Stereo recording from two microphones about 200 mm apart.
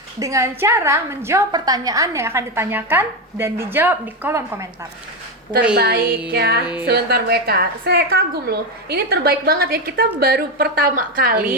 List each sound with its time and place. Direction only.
0.2 s a woman's voice: 15° right (ahead or behind)
5.7 s a woman's voice: 50° right (ahead or behind)